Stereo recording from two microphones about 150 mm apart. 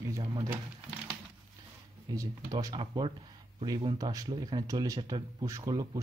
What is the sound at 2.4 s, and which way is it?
Speech, 30° right (ahead or behind).